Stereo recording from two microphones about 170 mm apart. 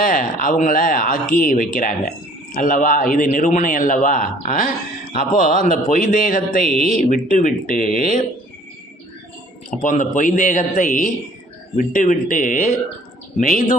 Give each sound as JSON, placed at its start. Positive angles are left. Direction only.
{"t": 0.0, "sound": "speech", "side_deg": 50}
{"t": 9.6, "sound": "speech", "side_deg": 50}